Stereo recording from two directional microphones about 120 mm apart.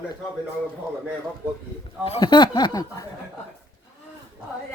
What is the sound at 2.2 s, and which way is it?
Speech, 40° left (ahead or behind).